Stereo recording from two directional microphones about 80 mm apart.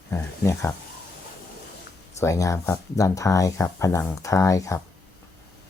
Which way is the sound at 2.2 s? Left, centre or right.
Left.